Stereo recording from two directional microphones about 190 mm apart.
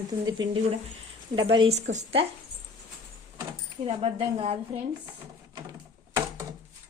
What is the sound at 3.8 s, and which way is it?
Speech, 35° right (ahead or behind).